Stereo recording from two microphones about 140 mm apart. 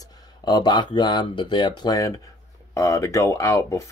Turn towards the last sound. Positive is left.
turn(degrees=20)  # may be behind; listen again after turning